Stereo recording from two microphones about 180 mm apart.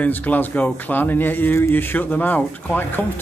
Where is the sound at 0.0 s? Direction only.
10° left (ahead or behind).